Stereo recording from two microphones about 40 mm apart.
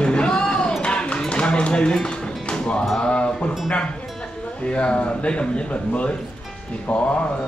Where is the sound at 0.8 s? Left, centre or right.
Left.